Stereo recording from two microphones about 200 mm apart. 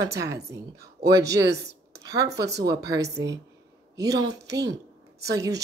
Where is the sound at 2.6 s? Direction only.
20° right (ahead or behind).